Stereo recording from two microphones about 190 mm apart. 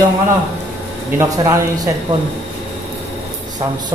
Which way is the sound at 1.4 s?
15° right (ahead or behind).